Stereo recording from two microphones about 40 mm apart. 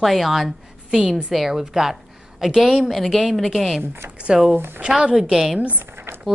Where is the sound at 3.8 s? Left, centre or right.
Right.